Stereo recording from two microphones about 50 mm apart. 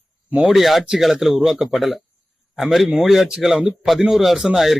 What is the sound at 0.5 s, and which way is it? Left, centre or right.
A man's voice, centre.